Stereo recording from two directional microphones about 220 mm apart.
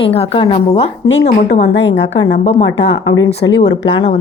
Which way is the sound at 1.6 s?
50° left (ahead or behind).